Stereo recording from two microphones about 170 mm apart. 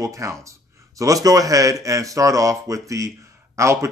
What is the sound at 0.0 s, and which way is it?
A man's voice, 20° right (ahead or behind).